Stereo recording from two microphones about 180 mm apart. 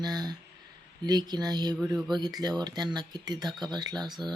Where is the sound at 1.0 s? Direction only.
20° right (ahead or behind).